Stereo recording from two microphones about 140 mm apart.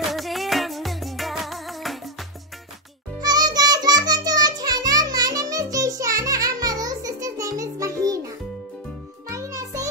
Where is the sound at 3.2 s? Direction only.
30° right (ahead or behind).